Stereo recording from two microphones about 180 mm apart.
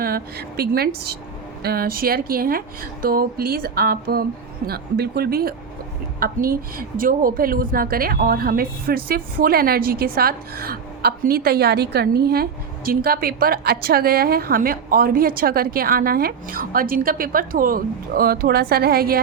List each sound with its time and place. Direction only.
0.0 s a woman's voice: 60° right (ahead or behind)